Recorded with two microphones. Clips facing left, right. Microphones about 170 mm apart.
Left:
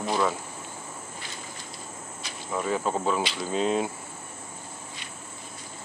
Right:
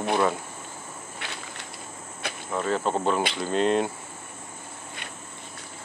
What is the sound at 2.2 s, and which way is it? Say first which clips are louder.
Cricket: right 11 dB; 60° right (ahead or behind).